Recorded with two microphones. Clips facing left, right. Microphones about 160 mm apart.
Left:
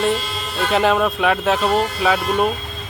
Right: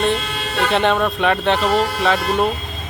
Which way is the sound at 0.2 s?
70° right (ahead or behind).